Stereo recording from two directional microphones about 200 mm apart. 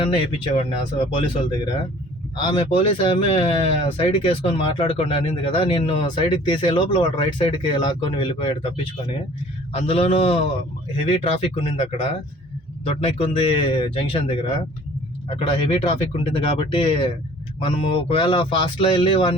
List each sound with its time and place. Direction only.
0.0 s speech: 25° left (ahead or behind)